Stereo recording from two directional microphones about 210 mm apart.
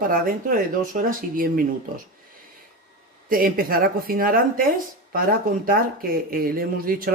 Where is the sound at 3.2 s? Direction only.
45° right (ahead or behind).